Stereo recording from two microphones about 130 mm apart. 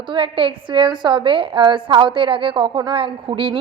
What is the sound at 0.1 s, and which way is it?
A woman's voice, 40° right (ahead or behind).